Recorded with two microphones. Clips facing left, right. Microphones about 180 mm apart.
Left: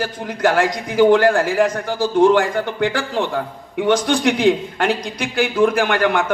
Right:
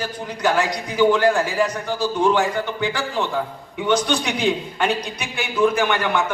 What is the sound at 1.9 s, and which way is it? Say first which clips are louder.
A man's voice: left 5 dB; 80° left.